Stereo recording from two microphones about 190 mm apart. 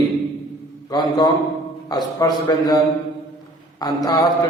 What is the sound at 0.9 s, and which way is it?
A man's voice, 20° left (ahead or behind).